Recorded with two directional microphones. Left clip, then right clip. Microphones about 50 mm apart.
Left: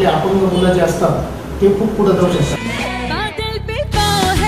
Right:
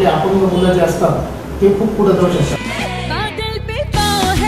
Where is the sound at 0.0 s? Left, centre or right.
Centre.